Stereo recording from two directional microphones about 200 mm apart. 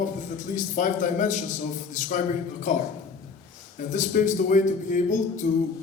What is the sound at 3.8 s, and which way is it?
A man's voice, 40° left (ahead or behind).